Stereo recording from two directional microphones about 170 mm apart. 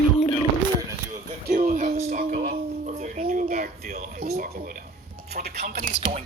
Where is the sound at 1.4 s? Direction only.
50° right (ahead or behind).